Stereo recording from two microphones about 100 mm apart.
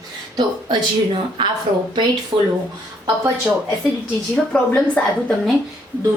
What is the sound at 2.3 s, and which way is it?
Speech, 50° right (ahead or behind).